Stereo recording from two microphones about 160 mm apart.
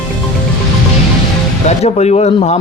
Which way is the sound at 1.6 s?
45° left (ahead or behind).